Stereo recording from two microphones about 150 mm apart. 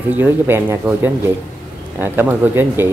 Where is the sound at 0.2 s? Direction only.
15° right (ahead or behind).